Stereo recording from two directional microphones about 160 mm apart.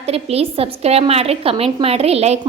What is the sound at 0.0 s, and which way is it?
A woman's voice, 40° right (ahead or behind).